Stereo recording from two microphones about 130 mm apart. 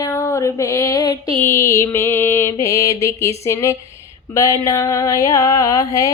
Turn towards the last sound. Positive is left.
turn(degrees=25)  # may be behind; listen again after turning